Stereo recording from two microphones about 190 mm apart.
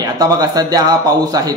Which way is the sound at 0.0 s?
20° right (ahead or behind).